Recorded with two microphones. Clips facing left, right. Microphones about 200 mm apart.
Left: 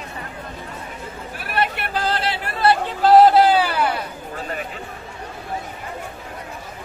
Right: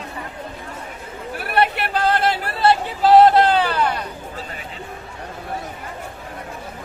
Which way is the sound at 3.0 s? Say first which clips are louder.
Even; centre (ahead or behind).